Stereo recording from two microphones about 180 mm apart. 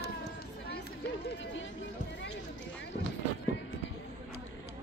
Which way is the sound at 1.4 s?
90° left.